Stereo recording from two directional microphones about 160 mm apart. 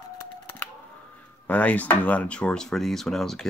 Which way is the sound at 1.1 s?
10° left (ahead or behind).